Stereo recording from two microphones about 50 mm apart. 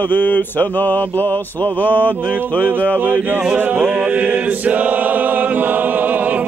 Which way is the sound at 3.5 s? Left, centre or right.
Right.